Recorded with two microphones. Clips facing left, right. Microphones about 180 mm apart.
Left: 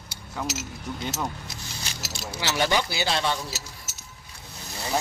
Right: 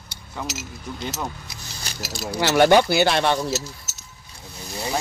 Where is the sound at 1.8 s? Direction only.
35° right (ahead or behind).